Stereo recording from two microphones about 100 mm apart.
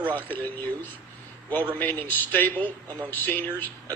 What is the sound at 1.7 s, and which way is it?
A man's voice, 20° left (ahead or behind).